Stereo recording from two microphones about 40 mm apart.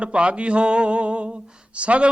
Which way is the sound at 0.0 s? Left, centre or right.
Right.